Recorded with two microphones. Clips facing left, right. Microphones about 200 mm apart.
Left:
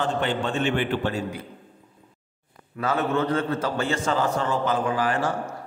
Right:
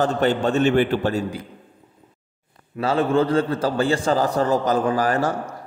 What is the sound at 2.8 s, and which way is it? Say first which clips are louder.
A man's voice: right 5 dB; 30° right (ahead or behind).